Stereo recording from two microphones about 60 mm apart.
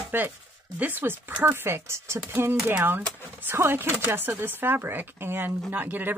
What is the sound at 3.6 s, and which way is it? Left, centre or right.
Speech, right.